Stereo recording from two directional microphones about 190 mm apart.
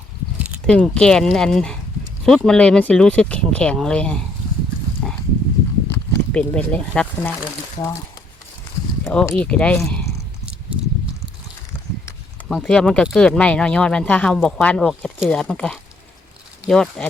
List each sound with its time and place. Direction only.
0.3 s a sound: 5° right (ahead or behind)
0.7 s speech: 5° left (ahead or behind)
5.0 s pig: 5° left (ahead or behind)
5.9 s speech: 10° left (ahead or behind)
7.8 s speech: 20° left (ahead or behind)
9.3 s speech: 5° left (ahead or behind)
12.5 s speech: centre (ahead or behind)